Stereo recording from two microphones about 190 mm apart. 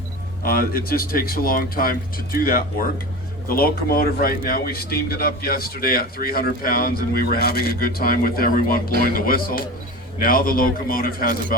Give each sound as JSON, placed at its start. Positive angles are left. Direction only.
{"t": 0.4, "sound": "a man's voice", "side_deg": 50}